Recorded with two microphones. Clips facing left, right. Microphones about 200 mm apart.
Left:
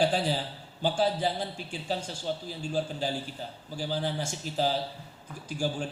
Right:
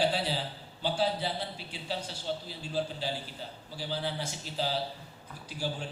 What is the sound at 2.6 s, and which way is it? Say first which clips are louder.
A man's voice: left 5 dB; 45° left (ahead or behind).